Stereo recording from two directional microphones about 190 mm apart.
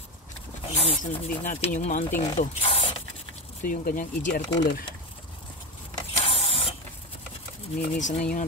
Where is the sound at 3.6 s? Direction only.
45° left (ahead or behind).